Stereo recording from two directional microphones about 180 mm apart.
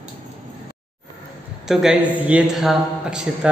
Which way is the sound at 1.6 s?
Centre (ahead or behind).